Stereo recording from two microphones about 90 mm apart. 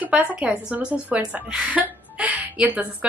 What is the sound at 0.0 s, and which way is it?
A woman's voice, 20° right (ahead or behind).